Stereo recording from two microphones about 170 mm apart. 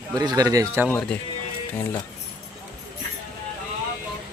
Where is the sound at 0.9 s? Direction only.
5° left (ahead or behind).